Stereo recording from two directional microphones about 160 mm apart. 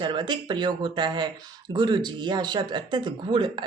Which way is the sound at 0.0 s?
30° right (ahead or behind).